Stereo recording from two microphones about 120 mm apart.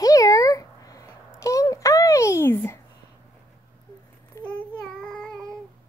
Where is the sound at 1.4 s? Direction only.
25° left (ahead or behind).